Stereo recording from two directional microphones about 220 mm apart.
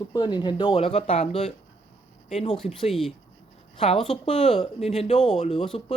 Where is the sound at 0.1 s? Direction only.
20° left (ahead or behind).